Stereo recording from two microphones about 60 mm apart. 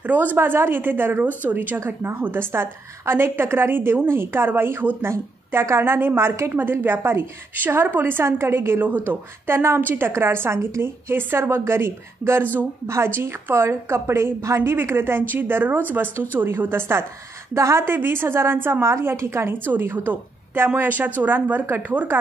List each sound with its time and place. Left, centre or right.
0.0 s a woman's voice: right
14.7 s a woman's voice: right
21.6 s a woman's voice: right